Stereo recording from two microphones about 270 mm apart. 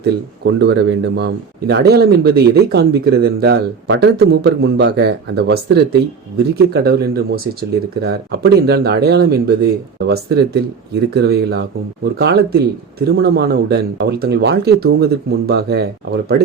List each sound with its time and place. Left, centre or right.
0.0 s speech: right